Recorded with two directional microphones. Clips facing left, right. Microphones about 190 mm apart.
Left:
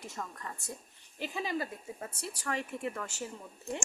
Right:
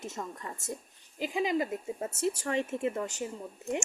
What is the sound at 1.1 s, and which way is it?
A woman's voice, 10° right (ahead or behind).